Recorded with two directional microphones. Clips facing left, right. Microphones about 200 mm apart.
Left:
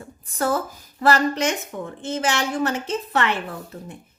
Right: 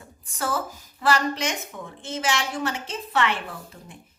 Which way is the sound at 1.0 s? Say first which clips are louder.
Left 4 dB; 50° left (ahead or behind).